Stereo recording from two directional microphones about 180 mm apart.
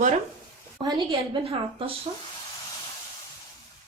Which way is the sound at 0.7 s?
25° right (ahead or behind).